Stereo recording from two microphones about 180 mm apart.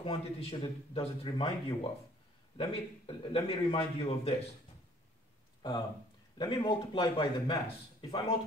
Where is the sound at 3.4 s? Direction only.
35° left (ahead or behind).